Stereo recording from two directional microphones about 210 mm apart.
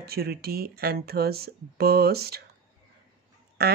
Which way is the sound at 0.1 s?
50° right (ahead or behind).